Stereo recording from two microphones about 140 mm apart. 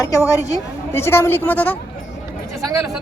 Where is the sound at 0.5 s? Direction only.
20° left (ahead or behind).